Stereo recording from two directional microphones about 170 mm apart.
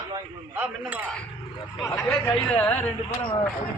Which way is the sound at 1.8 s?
15° left (ahead or behind).